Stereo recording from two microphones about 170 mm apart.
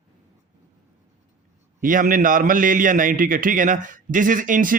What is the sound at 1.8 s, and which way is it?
A man's voice, 55° right (ahead or behind).